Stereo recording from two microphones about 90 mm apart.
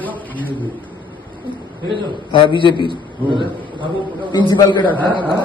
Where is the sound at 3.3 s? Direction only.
65° right (ahead or behind).